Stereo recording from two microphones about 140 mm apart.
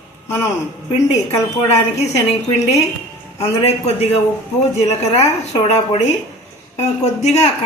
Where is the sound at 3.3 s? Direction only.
50° left (ahead or behind).